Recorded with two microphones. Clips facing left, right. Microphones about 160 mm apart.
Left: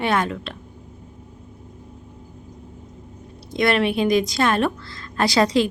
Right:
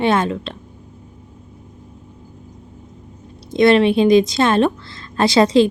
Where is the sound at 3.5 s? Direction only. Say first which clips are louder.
Right 7 dB; 25° right (ahead or behind).